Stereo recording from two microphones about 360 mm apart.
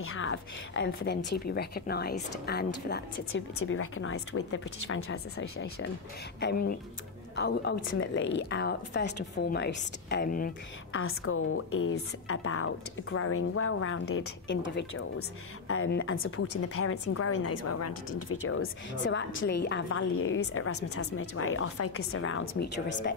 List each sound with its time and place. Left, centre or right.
0.0 s a woman's voice: left
6.4 s speech: left
10.9 s a woman's voice: left